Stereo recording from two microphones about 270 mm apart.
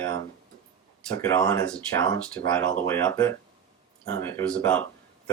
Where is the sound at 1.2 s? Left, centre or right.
Centre.